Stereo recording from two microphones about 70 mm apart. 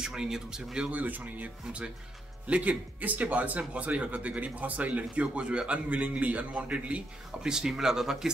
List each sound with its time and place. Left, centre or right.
0.0 s speech: centre
0.9 s speech: right
7.4 s speech: centre